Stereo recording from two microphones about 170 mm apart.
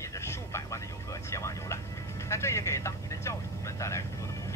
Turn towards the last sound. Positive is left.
turn(degrees=15)  # may be behind; listen again after turning